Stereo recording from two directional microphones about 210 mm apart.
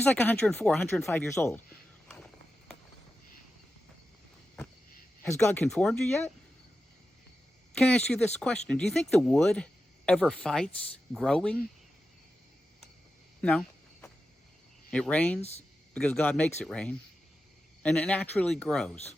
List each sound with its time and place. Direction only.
0.0 s a man's voice: 10° left (ahead or behind)
2.0 s a sound: 5° left (ahead or behind)
5.5 s speech: 5° left (ahead or behind)
7.8 s speech: 5° left (ahead or behind)
13.4 s a sound: 5° left (ahead or behind)
14.8 s speech: 5° left (ahead or behind)
15.4 s speech: 30° left (ahead or behind)
16.0 s speech: 5° left (ahead or behind)